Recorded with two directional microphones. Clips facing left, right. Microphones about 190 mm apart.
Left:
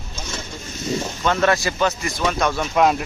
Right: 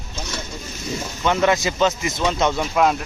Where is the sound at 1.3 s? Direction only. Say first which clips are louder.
Right 1 dB; 15° right (ahead or behind).